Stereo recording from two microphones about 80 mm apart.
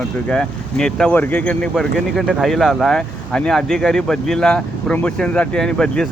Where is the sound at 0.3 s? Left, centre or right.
Centre.